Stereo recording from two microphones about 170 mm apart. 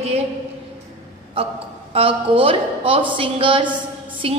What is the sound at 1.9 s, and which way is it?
A woman's voice, 35° right (ahead or behind).